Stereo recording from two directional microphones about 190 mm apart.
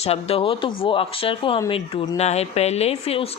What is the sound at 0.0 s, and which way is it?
A woman's voice, 30° left (ahead or behind).